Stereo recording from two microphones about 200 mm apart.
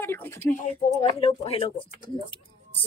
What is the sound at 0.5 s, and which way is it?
Speech, 40° left (ahead or behind).